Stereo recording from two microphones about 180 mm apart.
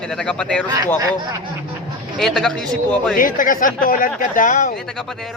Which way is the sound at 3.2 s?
50° left (ahead or behind).